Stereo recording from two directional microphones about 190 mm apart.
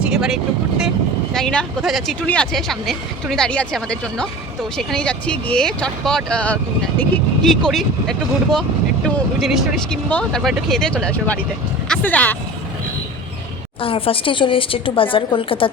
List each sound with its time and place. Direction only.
0.0 s vehicle: 5° right (ahead or behind)
1.3 s speech: 5° left (ahead or behind)
13.8 s a woman's voice: 30° left (ahead or behind)